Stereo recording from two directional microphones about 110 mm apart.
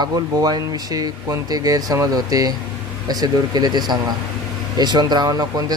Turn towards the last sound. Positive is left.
turn(degrees=-35)  # may be behind; listen again after turning